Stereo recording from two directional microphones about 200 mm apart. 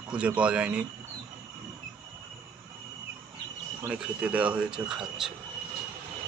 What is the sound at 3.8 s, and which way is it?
Speech, 5° right (ahead or behind).